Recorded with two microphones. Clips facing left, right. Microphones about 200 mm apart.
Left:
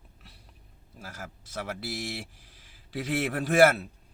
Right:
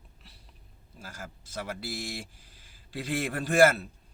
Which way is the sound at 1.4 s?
75° left (ahead or behind).